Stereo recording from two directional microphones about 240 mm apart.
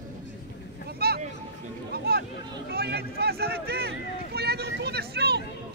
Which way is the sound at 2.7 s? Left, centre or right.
Right.